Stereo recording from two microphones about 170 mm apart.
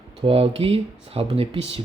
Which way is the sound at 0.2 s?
35° right (ahead or behind).